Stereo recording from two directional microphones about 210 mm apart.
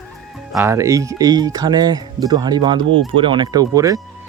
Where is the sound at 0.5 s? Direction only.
15° right (ahead or behind).